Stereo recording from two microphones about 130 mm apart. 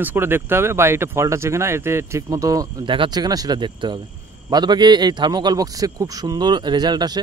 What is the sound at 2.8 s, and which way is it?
A man's voice, 40° right (ahead or behind).